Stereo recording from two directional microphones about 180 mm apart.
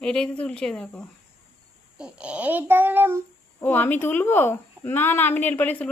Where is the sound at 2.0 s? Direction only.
5° right (ahead or behind).